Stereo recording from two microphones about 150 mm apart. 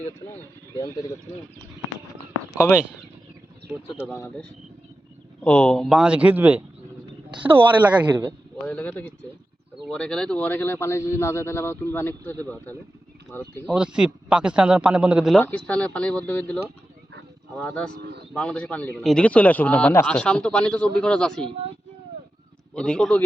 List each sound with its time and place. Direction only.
2.6 s a man's voice: 15° left (ahead or behind)
5.4 s speech: 10° left (ahead or behind); by 6.6 s 10° right (ahead or behind)
7.3 s speech: 30° right (ahead or behind)
8.6 s a man's voice: 10° left (ahead or behind)
13.7 s a man's voice: 5° right (ahead or behind)
15.4 s a man's voice: 10° left (ahead or behind)
17.6 s a man's voice: 10° left (ahead or behind)
22.7 s speech: 5° left (ahead or behind)